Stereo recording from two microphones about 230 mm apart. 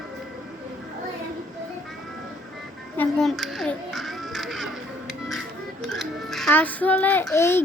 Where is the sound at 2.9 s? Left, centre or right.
Centre.